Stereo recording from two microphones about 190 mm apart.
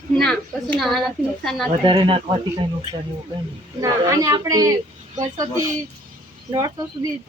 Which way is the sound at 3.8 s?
15° right (ahead or behind).